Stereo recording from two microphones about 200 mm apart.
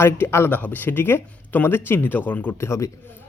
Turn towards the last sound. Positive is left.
turn(degrees=15)  # may be behind; listen again after turning